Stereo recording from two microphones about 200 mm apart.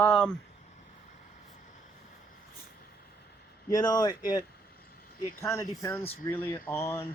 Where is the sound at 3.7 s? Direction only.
20° left (ahead or behind).